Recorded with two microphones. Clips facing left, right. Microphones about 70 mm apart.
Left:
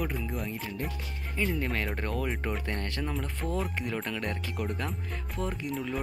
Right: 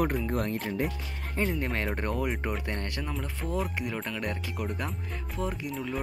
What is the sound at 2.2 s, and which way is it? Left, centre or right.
Speech, centre.